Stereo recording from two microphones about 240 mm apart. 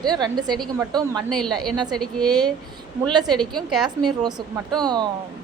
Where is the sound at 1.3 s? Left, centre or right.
Centre.